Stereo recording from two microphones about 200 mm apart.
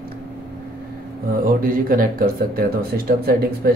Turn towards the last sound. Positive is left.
turn(degrees=-50)  # may be behind; listen again after turning